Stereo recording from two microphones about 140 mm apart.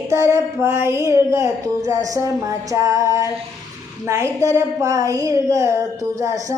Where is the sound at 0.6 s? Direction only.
20° right (ahead or behind).